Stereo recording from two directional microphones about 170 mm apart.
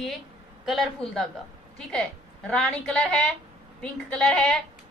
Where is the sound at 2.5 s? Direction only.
5° left (ahead or behind).